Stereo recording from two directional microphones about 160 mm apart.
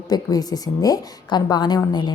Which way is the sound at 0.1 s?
25° left (ahead or behind).